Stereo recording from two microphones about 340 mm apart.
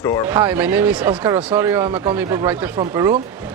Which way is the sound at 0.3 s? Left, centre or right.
Centre.